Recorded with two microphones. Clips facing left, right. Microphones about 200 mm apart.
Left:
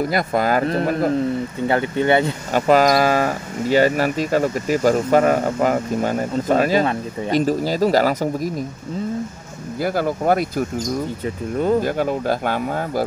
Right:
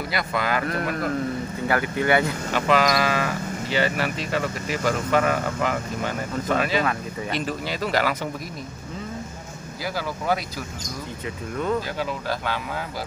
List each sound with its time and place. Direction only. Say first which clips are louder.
0.0 s speech: left 7 dB; 45° left (ahead or behind)
0.7 s speech: left 7 dB; 30° left (ahead or behind)
2.5 s speech: left 6 dB; 40° left (ahead or behind)
9.8 s speech: left 9 dB; 50° left (ahead or behind)
11.5 s speech: left 7 dB; 30° left (ahead or behind)
11.8 s speech: left 8 dB; 50° left (ahead or behind)